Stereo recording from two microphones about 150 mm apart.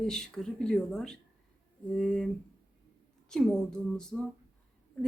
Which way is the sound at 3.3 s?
5° left (ahead or behind).